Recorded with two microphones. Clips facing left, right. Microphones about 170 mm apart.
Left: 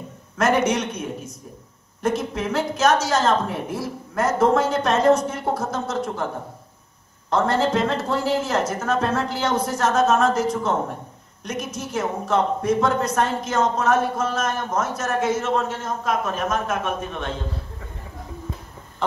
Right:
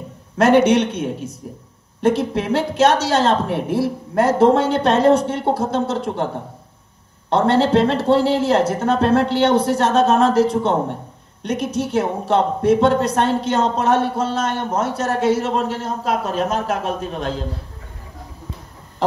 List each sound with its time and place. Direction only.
0.4 s speech: 30° right (ahead or behind)